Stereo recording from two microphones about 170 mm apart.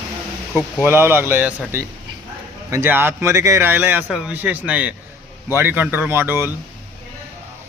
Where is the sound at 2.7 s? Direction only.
15° right (ahead or behind).